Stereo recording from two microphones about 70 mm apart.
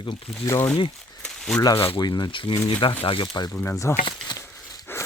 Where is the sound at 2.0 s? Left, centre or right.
Left.